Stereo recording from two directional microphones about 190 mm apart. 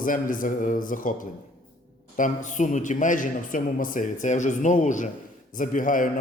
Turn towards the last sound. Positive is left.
turn(degrees=45)  # may be behind; listen again after turning